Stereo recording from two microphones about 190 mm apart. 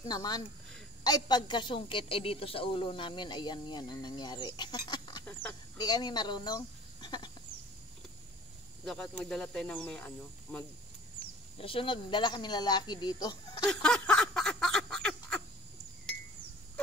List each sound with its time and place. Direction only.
0.1 s a woman's voice: 20° left (ahead or behind)
5.2 s a sound: 10° left (ahead or behind)
5.8 s speech: 20° left (ahead or behind)
8.8 s speech: centre (ahead or behind)
11.6 s a woman's voice: 30° left (ahead or behind)
13.7 s a sound: 5° left (ahead or behind)